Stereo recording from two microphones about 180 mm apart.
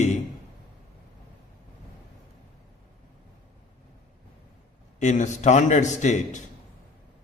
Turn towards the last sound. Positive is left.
turn(degrees=40)  # may be behind; listen again after turning